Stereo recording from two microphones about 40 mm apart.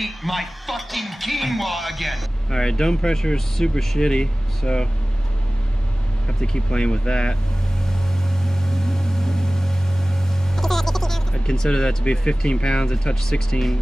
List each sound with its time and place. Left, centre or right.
0.0 s speech: centre
2.5 s speech: centre
6.2 s speech: left
8.5 s vehicle: centre
10.5 s a sound: centre
11.4 s speech: centre